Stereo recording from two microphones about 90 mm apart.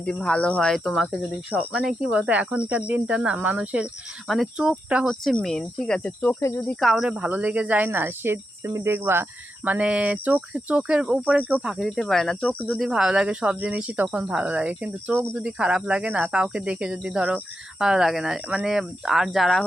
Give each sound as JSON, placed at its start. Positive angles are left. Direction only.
{"t": 0.0, "sound": "speech", "side_deg": 10}
{"t": 1.5, "sound": "speech", "side_deg": -10}
{"t": 5.0, "sound": "speech", "side_deg": 5}
{"t": 6.7, "sound": "speech", "side_deg": 0}
{"t": 7.9, "sound": "cricket", "side_deg": -25}
{"t": 9.6, "sound": "speech", "side_deg": -15}
{"t": 11.7, "sound": "speech", "side_deg": 0}
{"t": 12.9, "sound": "speech", "side_deg": -10}
{"t": 15.4, "sound": "speech", "side_deg": -10}